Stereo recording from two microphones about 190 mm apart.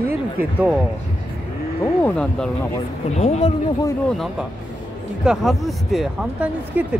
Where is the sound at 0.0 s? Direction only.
10° right (ahead or behind).